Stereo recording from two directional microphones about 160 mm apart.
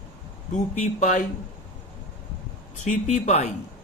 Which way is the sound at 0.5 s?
50° left (ahead or behind).